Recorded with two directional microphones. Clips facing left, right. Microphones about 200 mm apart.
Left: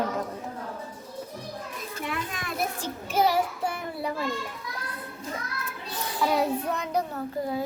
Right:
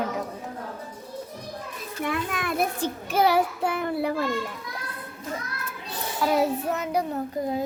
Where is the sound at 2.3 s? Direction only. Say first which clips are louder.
Right 5 dB; 60° right (ahead or behind).